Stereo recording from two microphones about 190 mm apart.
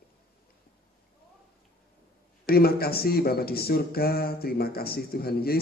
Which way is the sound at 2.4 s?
55° left (ahead or behind).